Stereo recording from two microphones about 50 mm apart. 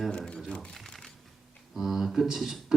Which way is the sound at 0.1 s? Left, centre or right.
Centre.